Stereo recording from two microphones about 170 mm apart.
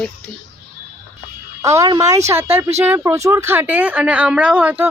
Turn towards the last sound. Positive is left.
turn(degrees=-10)  # may be behind; listen again after turning